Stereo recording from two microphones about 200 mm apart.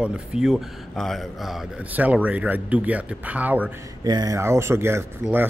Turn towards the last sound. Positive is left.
turn(degrees=-10)  # may be behind; listen again after turning